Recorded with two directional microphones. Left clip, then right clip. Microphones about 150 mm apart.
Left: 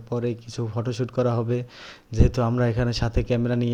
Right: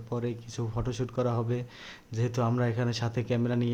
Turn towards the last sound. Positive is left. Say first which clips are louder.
# left 5 dB
turn(degrees=30)  # may be behind; listen again after turning